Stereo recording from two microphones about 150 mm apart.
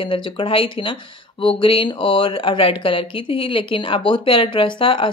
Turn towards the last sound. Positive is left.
turn(degrees=35)  # may be behind; listen again after turning